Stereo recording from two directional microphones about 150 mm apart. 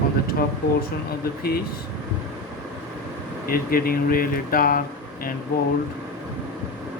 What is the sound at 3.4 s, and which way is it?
Speech, 75° left (ahead or behind).